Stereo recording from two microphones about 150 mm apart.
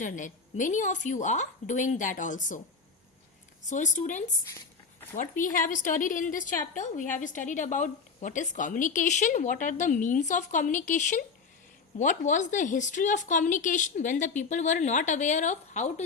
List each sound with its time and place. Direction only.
0.0 s a woman's voice: 60° left (ahead or behind)
3.7 s a woman's voice: 55° left (ahead or behind)